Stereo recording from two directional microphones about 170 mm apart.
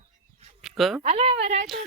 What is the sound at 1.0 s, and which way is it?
Speech, 35° right (ahead or behind).